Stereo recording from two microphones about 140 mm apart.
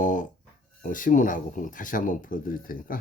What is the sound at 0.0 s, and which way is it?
Dog, 70° left (ahead or behind).